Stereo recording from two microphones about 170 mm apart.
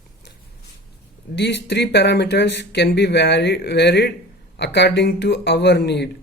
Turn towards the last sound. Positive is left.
turn(degrees=75)  # may be behind; listen again after turning